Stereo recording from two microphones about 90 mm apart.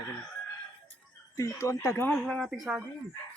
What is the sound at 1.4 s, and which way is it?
Speech, 40° left (ahead or behind).